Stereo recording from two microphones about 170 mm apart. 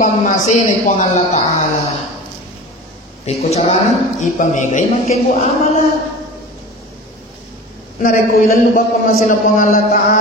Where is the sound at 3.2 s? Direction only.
40° left (ahead or behind).